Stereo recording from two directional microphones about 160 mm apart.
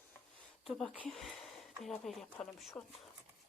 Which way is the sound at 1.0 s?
Centre (ahead or behind).